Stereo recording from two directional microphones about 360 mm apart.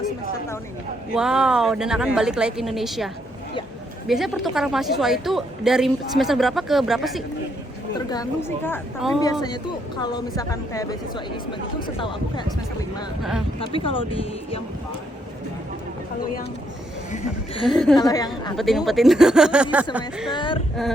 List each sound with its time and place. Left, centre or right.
1.1 s a woman's voice: centre
4.1 s a woman's voice: centre
10.3 s a woman's voice: centre
13.6 s a woman's voice: centre
17.1 s speech: centre
17.7 s a woman's voice: centre
20.3 s a woman's voice: centre